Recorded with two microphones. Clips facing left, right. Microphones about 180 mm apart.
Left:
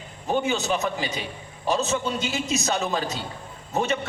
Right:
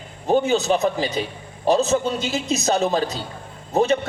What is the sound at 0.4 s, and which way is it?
A woman's voice, 35° right (ahead or behind).